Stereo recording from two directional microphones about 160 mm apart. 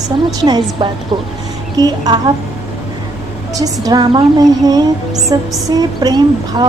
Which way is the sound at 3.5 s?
20° right (ahead or behind).